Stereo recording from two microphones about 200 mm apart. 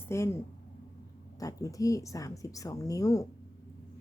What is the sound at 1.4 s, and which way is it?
A woman's voice, 15° left (ahead or behind).